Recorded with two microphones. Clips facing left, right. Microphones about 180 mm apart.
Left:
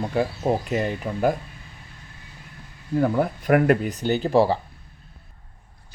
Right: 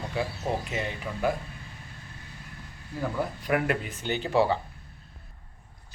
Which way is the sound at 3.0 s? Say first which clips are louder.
Left 8 dB; 55° left (ahead or behind).